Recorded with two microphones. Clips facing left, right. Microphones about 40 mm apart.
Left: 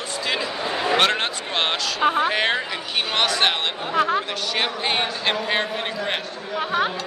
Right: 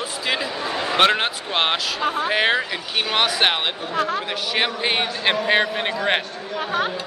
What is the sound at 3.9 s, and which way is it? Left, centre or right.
Speech, centre.